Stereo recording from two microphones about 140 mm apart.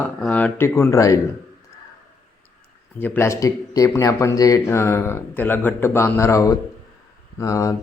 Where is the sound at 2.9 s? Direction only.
15° left (ahead or behind).